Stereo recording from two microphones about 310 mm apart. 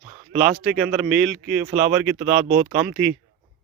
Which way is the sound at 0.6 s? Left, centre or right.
Centre.